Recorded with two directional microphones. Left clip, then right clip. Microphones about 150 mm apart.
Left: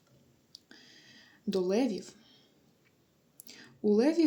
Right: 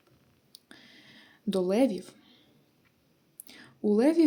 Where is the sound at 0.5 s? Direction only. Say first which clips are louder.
Right 2 dB; 35° right (ahead or behind).